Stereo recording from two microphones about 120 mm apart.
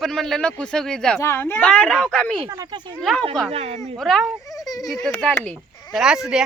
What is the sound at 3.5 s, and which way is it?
Speech, 60° right (ahead or behind).